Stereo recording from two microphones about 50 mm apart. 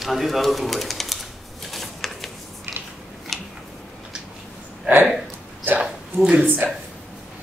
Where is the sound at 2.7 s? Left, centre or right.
Right.